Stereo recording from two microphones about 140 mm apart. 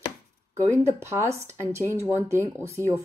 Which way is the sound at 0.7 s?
20° right (ahead or behind).